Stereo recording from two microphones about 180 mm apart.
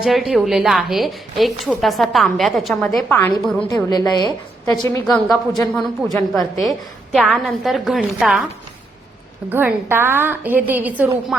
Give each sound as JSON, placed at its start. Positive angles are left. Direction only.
{"t": 0.0, "sound": "a woman's voice", "side_deg": 0}
{"t": 3.8, "sound": "a woman's voice", "side_deg": 20}
{"t": 5.0, "sound": "a woman's voice", "side_deg": 0}
{"t": 9.5, "sound": "a woman's voice", "side_deg": -10}